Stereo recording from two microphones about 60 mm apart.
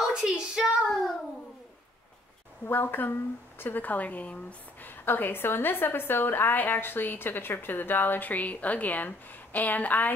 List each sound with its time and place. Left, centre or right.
0.1 s speech: centre
2.6 s a woman's voice: left
5.0 s a woman's voice: left